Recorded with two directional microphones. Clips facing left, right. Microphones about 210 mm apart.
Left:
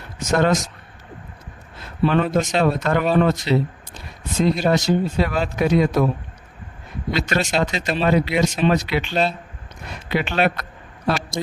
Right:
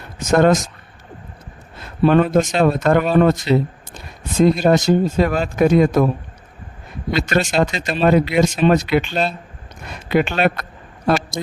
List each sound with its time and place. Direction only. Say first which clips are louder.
0.3 s speech: right 5 dB; 50° right (ahead or behind)
2.0 s speech: right 5 dB; 50° right (ahead or behind)
7.1 s speech: right 3 dB; 50° right (ahead or behind)
10.1 s a sound: right 4 dB; 45° right (ahead or behind)